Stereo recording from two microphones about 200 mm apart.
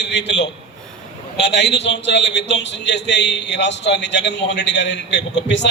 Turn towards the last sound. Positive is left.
turn(degrees=60)  # may be behind; listen again after turning